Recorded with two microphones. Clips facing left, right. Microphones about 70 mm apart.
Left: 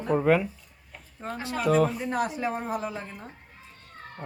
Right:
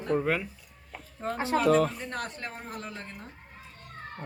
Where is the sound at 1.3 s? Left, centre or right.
Right.